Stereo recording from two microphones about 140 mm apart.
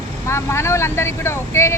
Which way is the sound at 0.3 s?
20° left (ahead or behind).